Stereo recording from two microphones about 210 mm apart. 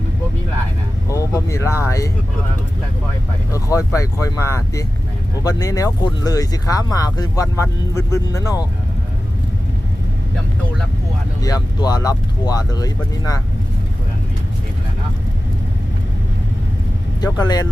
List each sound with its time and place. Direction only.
1.0 s speech: 15° left (ahead or behind)
3.5 s speech: 15° left (ahead or behind)
11.4 s speech: 20° left (ahead or behind)
17.2 s speech: 20° left (ahead or behind)